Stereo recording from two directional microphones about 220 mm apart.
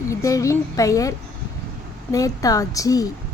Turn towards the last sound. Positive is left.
turn(degrees=15)  # may be behind; listen again after turning